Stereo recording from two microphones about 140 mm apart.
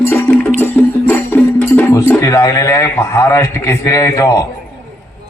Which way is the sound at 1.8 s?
15° left (ahead or behind).